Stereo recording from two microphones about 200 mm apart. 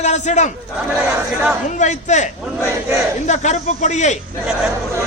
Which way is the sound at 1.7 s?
35° left (ahead or behind).